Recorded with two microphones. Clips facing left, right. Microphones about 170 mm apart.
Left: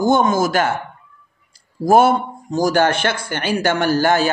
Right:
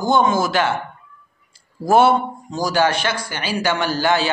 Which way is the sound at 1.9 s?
45° left (ahead or behind).